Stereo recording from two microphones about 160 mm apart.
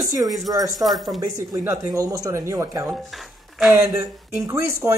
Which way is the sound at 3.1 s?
Centre (ahead or behind).